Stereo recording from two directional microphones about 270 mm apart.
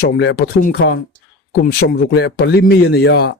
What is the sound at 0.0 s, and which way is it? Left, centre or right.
A man's voice, left.